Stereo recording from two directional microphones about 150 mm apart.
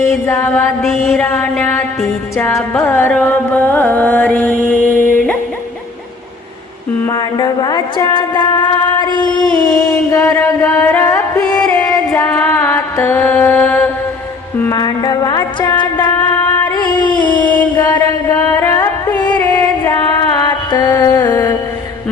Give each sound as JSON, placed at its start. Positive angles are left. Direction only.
{"t": 0.0, "sound": "mantra", "side_deg": 20}
{"t": 0.8, "sound": "mantra", "side_deg": 5}
{"t": 1.3, "sound": "music", "side_deg": 10}
{"t": 4.9, "sound": "yodeling", "side_deg": 10}
{"t": 7.1, "sound": "music", "side_deg": 30}
{"t": 9.8, "sound": "a sound", "side_deg": 20}
{"t": 10.3, "sound": "music", "side_deg": 15}
{"t": 12.2, "sound": "mantra", "side_deg": 10}
{"t": 14.6, "sound": "music", "side_deg": 25}
{"t": 16.7, "sound": "a sound", "side_deg": 25}
{"t": 17.4, "sound": "mantra", "side_deg": 10}
{"t": 17.7, "sound": "music", "side_deg": 25}